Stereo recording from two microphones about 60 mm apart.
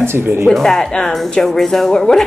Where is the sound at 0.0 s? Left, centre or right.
Right.